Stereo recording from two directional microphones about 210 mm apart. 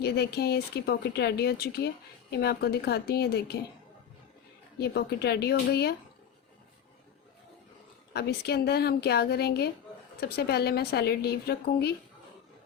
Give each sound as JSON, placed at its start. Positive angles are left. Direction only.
{"t": 0.0, "sound": "speech", "side_deg": 50}
{"t": 4.8, "sound": "speech", "side_deg": 50}
{"t": 8.1, "sound": "speech", "side_deg": 50}